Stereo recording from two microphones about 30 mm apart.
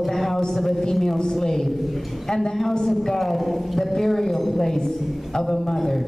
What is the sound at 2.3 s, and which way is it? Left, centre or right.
A woman's voice, centre.